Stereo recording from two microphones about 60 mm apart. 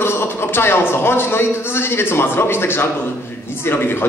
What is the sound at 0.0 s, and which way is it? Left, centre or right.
A man's voice, left.